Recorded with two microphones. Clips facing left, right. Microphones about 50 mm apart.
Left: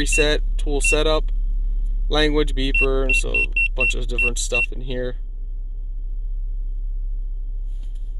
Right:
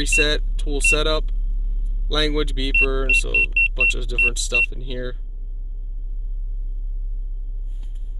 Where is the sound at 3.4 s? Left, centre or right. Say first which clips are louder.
Right 2 dB; centre.